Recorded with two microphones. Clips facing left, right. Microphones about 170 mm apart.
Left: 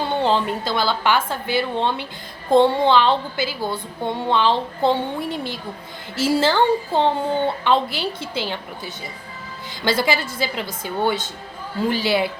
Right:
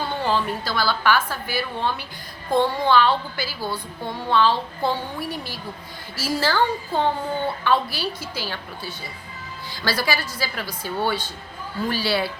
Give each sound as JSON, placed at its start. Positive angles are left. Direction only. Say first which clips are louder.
{"t": 0.2, "sound": "a woman's voice", "louder": "left 3 dB", "side_deg": 20}